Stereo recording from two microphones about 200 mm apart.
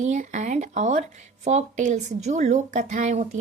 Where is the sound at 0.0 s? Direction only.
35° right (ahead or behind).